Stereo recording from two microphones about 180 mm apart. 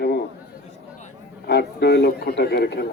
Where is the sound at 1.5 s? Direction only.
70° left (ahead or behind).